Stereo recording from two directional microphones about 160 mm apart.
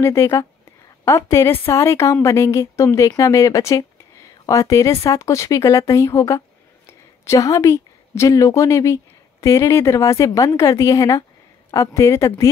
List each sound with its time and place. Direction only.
0.0 s a woman's voice: 15° left (ahead or behind)